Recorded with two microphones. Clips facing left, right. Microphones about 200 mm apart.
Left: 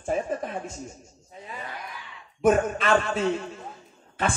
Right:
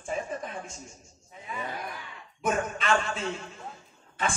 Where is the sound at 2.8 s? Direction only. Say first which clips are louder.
Left 5 dB; 40° left (ahead or behind).